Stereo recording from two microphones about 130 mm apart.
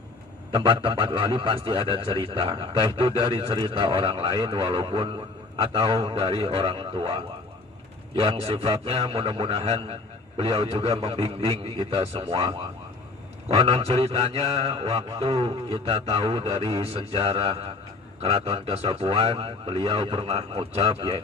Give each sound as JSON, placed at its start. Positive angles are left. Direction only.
{"t": 0.5, "sound": "a man's voice", "side_deg": -45}